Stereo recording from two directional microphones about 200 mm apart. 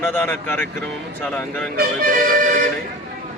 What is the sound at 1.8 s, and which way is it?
Music, 45° right (ahead or behind).